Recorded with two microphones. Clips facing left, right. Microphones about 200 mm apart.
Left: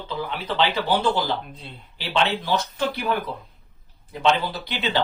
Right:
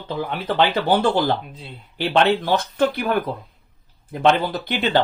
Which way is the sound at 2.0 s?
50° right (ahead or behind).